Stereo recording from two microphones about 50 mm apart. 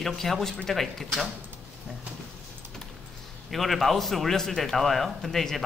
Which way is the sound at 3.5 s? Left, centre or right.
Centre.